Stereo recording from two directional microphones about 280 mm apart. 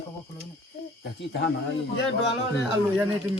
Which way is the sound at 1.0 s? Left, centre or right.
Left.